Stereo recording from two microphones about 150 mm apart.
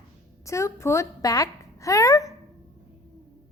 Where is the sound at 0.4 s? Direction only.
20° left (ahead or behind).